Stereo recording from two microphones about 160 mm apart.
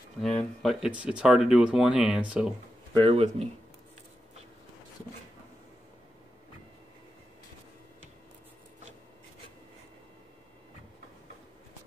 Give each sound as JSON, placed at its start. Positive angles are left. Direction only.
{"t": 0.2, "sound": "speech", "side_deg": 5}
{"t": 2.9, "sound": "speech", "side_deg": -35}